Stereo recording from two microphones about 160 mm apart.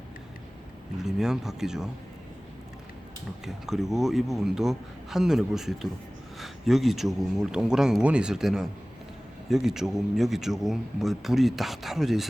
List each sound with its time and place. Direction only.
1.0 s a man's voice: 5° right (ahead or behind)
3.4 s a man's voice: centre (ahead or behind)